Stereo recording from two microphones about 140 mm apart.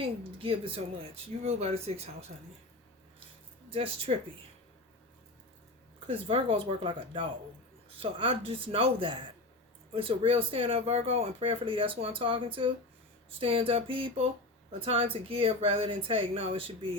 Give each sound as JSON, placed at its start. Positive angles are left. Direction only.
{"t": 0.0, "sound": "speech", "side_deg": -40}
{"t": 3.7, "sound": "speech", "side_deg": -40}
{"t": 6.1, "sound": "speech", "side_deg": -40}